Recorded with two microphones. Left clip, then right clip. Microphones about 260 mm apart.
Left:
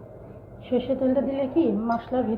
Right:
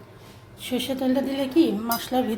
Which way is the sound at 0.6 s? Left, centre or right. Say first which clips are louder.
Left 2 dB; right.